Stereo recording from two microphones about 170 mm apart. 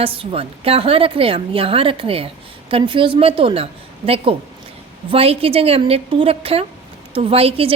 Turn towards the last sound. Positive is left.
turn(degrees=-35)  # may be behind; listen again after turning